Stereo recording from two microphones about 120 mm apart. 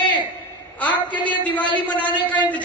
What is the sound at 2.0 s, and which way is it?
Speech, 40° left (ahead or behind).